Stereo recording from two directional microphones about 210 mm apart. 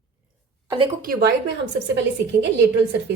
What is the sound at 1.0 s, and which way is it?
Speech, 45° right (ahead or behind).